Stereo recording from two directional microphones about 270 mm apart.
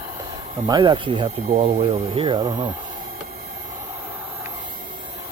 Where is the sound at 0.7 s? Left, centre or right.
Centre.